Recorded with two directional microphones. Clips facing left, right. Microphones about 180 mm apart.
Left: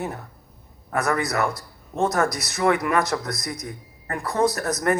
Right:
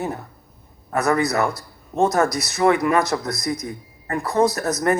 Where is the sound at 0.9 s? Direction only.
25° right (ahead or behind).